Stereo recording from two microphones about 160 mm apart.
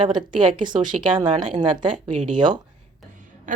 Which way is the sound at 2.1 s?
55° right (ahead or behind).